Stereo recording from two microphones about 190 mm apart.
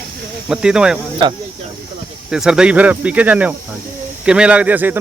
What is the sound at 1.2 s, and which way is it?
Speech, 25° right (ahead or behind).